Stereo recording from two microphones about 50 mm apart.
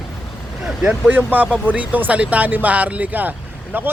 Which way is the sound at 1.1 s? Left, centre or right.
Right.